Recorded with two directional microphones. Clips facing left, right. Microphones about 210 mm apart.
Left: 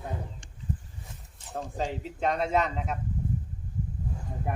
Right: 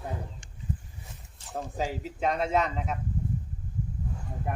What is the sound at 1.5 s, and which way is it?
A man's voice, 5° right (ahead or behind).